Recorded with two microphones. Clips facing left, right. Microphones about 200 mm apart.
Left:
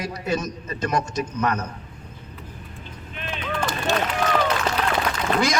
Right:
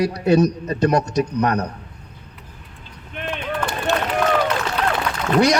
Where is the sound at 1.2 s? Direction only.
40° right (ahead or behind).